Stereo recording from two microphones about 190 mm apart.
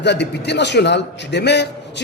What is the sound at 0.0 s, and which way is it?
A man's voice, 65° left (ahead or behind).